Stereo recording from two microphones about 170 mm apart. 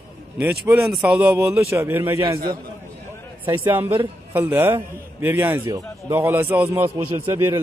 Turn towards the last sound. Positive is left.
turn(degrees=-20)  # may be behind; listen again after turning